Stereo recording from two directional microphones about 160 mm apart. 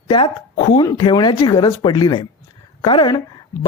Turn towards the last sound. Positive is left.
turn(degrees=30)  # may be behind; listen again after turning